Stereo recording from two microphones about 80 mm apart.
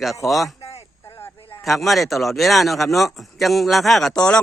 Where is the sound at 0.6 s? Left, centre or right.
Left.